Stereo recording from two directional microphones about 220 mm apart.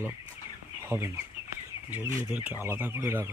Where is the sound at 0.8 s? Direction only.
10° right (ahead or behind).